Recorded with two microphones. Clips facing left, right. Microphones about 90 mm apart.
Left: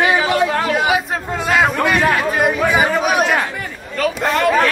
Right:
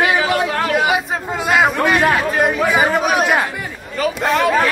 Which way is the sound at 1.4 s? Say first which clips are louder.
Right 1 dB; 5° right (ahead or behind).